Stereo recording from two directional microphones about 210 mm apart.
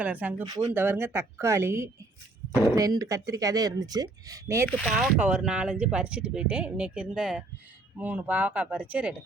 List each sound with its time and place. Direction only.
0.0 s speech: 5° right (ahead or behind)